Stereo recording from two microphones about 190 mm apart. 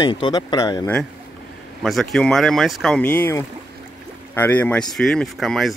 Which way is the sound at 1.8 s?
Centre (ahead or behind).